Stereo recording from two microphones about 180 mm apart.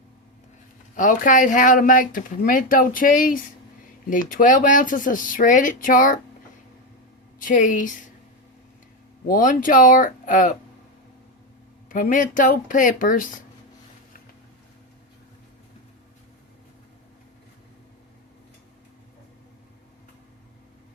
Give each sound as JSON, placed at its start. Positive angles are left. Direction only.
{"t": 0.9, "sound": "speech", "side_deg": 45}
{"t": 7.3, "sound": "a woman's voice", "side_deg": 50}
{"t": 9.2, "sound": "speech", "side_deg": 50}
{"t": 11.9, "sound": "speech", "side_deg": 50}